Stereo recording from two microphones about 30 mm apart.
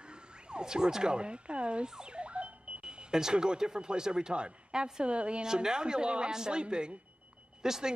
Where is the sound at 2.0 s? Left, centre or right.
Right.